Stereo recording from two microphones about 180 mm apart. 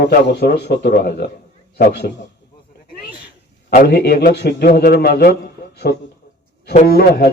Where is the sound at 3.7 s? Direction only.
60° left (ahead or behind).